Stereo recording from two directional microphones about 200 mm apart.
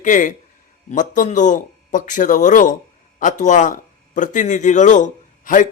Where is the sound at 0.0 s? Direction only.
40° left (ahead or behind).